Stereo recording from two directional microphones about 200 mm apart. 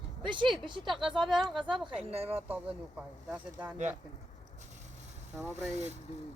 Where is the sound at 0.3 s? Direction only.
25° right (ahead or behind).